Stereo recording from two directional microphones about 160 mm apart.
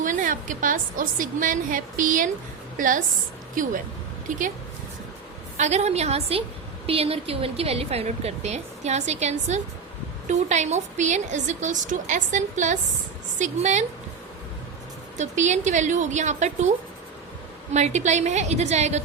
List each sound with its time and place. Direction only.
0.0 s a woman's voice: 55° right (ahead or behind)
5.5 s a woman's voice: 45° right (ahead or behind)
15.2 s a woman's voice: 50° right (ahead or behind)
17.7 s a woman's voice: 45° right (ahead or behind)